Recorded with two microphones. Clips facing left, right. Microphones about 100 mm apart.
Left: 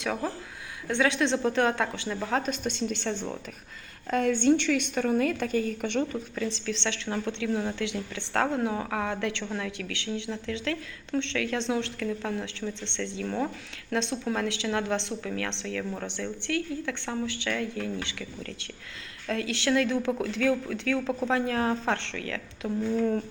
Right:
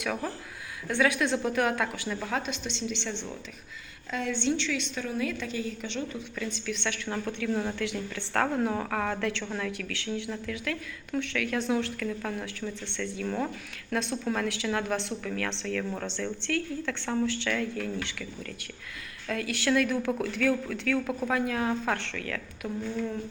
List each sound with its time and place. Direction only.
0.0 s speech: 25° left (ahead or behind)
2.5 s a woman's voice: 50° left (ahead or behind)
6.3 s speech: 30° left (ahead or behind)
7.5 s speech: 5° left (ahead or behind)
7.8 s speech: 20° left (ahead or behind)
19.3 s a woman's voice: 25° left (ahead or behind)